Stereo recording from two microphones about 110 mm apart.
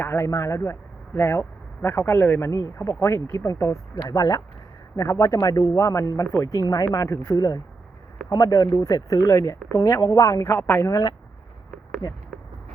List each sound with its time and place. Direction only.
0.0 s a man's voice: 20° left (ahead or behind)